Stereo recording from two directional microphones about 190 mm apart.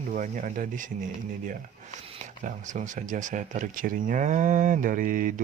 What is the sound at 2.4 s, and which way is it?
Speech, 40° right (ahead or behind).